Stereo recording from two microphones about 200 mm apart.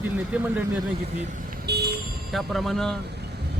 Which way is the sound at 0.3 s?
5° right (ahead or behind).